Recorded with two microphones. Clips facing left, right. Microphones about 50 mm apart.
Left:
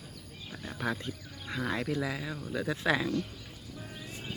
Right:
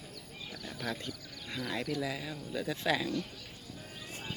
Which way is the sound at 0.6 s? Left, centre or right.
Left.